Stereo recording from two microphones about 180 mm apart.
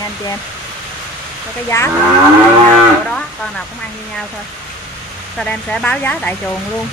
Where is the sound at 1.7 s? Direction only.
15° left (ahead or behind).